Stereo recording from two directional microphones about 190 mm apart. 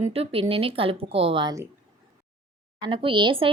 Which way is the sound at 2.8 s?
25° right (ahead or behind).